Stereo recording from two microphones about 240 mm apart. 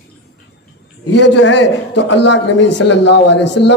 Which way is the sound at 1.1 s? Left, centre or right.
Left.